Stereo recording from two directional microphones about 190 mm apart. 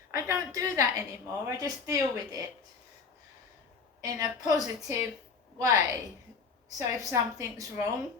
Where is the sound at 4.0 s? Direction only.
20° right (ahead or behind).